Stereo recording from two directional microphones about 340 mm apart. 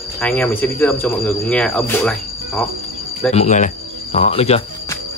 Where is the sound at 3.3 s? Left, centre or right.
Centre.